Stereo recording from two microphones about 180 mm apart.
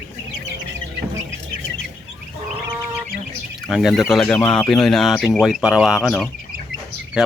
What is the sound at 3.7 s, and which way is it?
Speech, centre (ahead or behind).